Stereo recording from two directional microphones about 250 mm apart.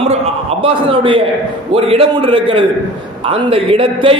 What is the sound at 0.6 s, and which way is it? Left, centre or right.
A man's voice, right.